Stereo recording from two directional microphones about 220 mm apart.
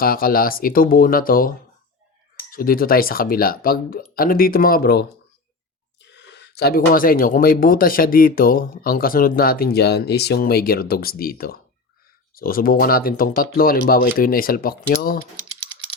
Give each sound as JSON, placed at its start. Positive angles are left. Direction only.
{"t": 0.0, "sound": "speech", "side_deg": 40}